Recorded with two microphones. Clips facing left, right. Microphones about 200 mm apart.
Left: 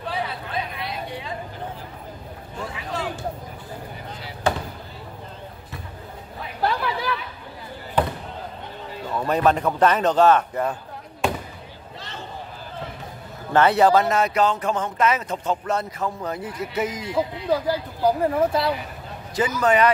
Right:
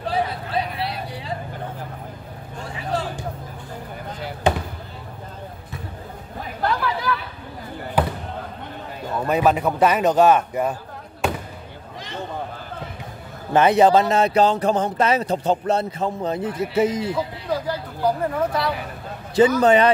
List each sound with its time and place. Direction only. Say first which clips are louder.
0.1 s a sound: right 5 dB; 35° right (ahead or behind)
2.7 s a sound: right 6 dB; 35° right (ahead or behind)
4.4 s basketball bounce: right 3 dB; 20° right (ahead or behind)
6.6 s chatter: even; 25° left (ahead or behind)
8.0 s basketball bounce: right 1 dB; 10° right (ahead or behind)
9.3 s a man's voice: right 1 dB; 5° right (ahead or behind)
13.5 s speech: right 2 dB; 15° right (ahead or behind)
18.2 s speech: left 2 dB; 25° left (ahead or behind)
19.3 s speech: right 6 dB; 30° right (ahead or behind)